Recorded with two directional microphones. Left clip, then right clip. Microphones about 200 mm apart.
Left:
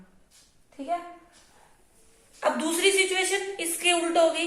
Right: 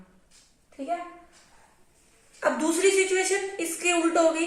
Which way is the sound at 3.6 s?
50° right (ahead or behind).